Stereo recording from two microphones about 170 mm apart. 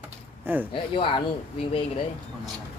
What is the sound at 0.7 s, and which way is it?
Speech, 30° left (ahead or behind).